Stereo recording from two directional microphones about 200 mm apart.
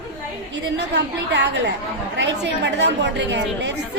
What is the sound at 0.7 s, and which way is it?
A woman's voice, 60° right (ahead or behind).